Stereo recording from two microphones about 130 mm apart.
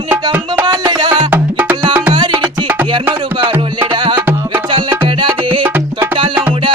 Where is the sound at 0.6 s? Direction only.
35° right (ahead or behind).